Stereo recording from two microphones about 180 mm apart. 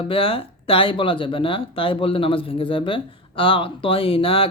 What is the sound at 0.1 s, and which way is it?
Speech, 30° left (ahead or behind).